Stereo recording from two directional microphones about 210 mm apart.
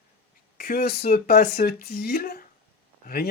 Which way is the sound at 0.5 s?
45° left (ahead or behind).